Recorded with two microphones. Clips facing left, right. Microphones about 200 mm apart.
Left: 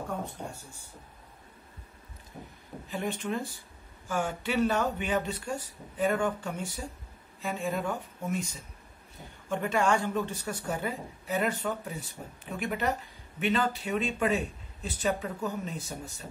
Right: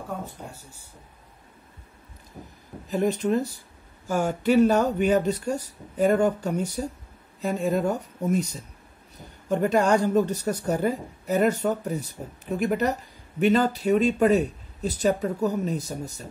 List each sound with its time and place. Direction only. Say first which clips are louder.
2.9 s a woman's voice: right 9 dB; 40° right (ahead or behind)